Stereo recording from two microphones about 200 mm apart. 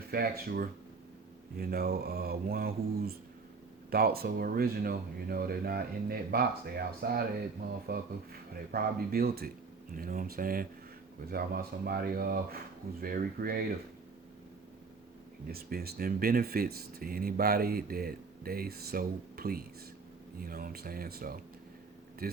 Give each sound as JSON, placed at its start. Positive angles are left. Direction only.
{"t": 0.1, "sound": "speech", "side_deg": -50}
{"t": 15.4, "sound": "speech", "side_deg": -50}